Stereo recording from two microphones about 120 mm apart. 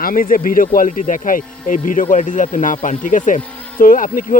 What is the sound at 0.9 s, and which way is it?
Speech, 90° left.